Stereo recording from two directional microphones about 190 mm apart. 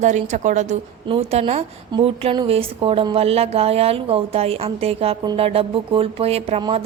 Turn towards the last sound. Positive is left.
turn(degrees=-30)  # may be behind; listen again after turning